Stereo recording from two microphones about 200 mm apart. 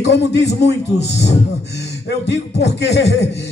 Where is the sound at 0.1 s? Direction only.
60° left (ahead or behind).